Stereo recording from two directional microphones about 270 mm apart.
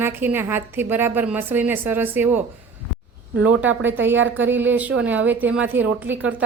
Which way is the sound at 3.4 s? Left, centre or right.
Right.